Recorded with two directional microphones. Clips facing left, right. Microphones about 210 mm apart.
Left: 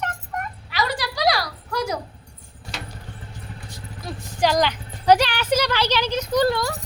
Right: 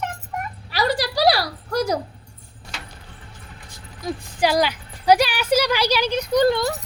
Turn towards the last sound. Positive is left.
turn(degrees=-15)  # may be behind; listen again after turning